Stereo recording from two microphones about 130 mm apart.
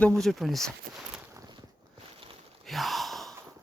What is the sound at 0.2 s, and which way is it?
Speech, centre (ahead or behind).